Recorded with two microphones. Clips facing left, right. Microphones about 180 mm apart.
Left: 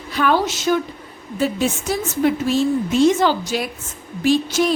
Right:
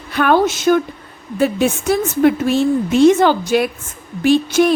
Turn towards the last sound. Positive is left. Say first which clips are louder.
# right 4 dB
turn(degrees=-60)  # may be behind; listen again after turning